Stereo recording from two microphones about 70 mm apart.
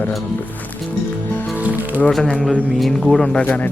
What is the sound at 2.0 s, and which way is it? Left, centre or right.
Speech, centre.